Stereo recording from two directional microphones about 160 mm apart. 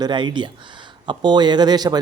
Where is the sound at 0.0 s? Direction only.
30° right (ahead or behind).